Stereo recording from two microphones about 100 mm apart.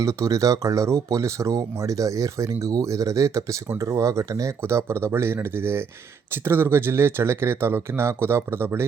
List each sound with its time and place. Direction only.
0.0 s speech: 30° right (ahead or behind)